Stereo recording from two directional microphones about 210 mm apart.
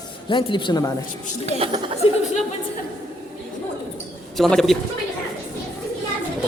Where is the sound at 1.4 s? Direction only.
25° right (ahead or behind).